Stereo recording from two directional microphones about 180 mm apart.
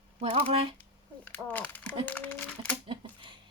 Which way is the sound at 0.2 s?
35° right (ahead or behind).